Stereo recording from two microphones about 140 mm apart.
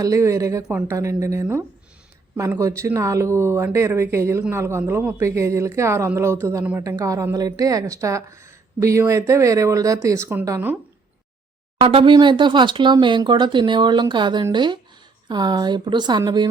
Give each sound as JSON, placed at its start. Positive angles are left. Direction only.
{"t": 0.0, "sound": "a woman's voice", "side_deg": -20}
{"t": 11.8, "sound": "speech", "side_deg": -40}